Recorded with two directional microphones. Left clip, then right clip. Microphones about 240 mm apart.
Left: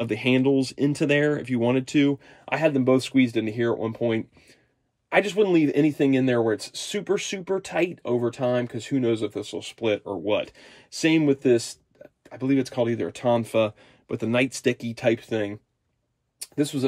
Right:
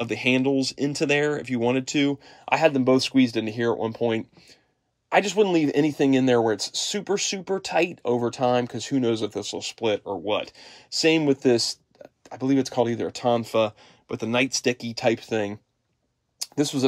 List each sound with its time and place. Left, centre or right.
0.0 s speech: centre
16.5 s speech: centre